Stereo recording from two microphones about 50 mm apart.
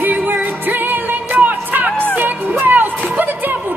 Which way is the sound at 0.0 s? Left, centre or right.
Right.